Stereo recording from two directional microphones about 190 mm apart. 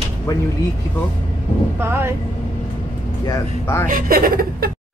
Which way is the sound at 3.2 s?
15° left (ahead or behind).